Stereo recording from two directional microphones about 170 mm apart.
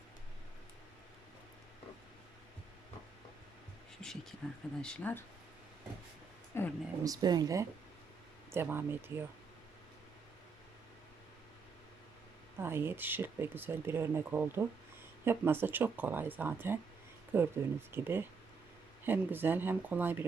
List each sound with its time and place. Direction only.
4.0 s a sound: centre (ahead or behind)
4.8 s speech: 5° left (ahead or behind)
6.5 s speech: 15° left (ahead or behind)
7.0 s speech: 20° right (ahead or behind)
12.5 s speech: 15° right (ahead or behind)